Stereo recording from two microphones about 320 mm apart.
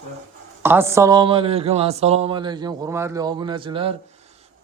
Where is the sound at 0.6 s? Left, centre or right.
Centre.